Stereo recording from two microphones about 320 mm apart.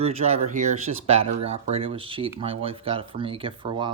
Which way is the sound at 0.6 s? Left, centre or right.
Right.